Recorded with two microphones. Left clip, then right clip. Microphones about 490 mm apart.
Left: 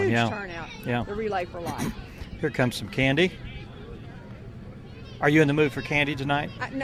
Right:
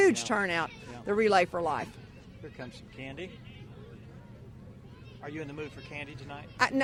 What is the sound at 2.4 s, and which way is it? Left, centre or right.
Speech, left.